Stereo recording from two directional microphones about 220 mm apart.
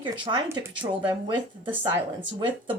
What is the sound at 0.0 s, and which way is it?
Speech, 20° right (ahead or behind).